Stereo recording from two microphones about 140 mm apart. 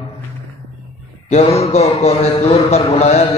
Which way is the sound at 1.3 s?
50° left (ahead or behind).